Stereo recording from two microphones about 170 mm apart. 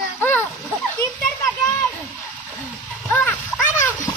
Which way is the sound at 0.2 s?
10° left (ahead or behind).